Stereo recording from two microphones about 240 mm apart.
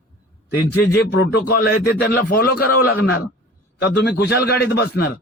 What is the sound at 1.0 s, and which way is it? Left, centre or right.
A man's voice, left.